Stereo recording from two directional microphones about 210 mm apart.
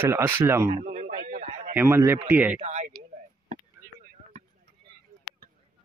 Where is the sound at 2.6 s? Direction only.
35° right (ahead or behind).